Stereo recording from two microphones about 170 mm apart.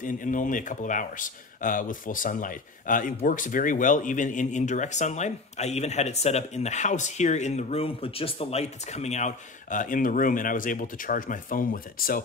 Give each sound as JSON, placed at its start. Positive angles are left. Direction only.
{"t": 0.0, "sound": "speech", "side_deg": 50}